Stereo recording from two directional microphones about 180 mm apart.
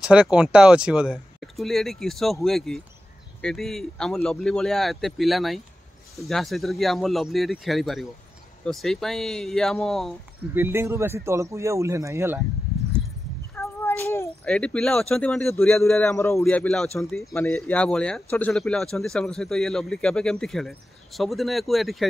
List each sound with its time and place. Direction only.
0.0 s speech: 5° right (ahead or behind)
10.5 s speech: 15° right (ahead or behind)
13.6 s speech: 15° left (ahead or behind)
17.3 s speech: 15° left (ahead or behind)